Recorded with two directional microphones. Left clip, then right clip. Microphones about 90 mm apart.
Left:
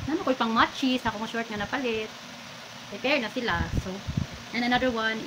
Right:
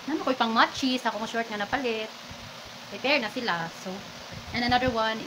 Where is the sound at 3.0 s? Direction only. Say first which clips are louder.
Right 1 dB; 35° right (ahead or behind).